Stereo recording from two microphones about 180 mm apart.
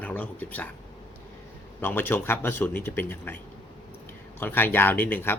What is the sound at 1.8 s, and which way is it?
Speech, 10° left (ahead or behind).